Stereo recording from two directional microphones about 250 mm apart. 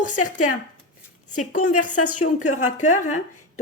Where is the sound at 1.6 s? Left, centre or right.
Left.